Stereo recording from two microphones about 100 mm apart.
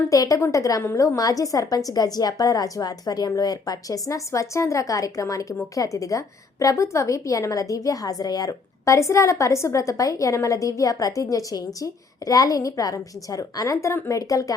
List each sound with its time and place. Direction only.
0.1 s a woman's voice: 35° left (ahead or behind)